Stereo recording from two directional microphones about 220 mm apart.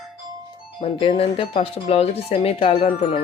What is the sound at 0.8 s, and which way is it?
Speech, 25° left (ahead or behind).